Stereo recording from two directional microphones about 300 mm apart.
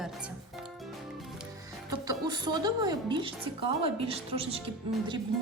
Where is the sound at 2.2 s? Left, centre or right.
Centre.